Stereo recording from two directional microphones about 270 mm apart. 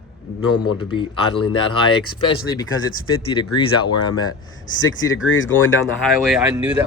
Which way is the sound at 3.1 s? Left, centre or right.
Centre.